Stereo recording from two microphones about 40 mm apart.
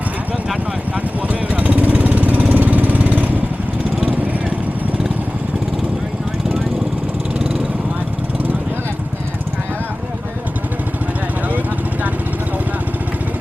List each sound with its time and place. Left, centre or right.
1.3 s lawn mower: right